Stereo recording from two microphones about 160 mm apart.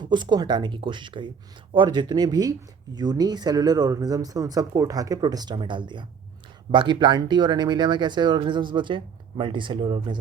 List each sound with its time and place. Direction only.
0.0 s speech: 30° right (ahead or behind)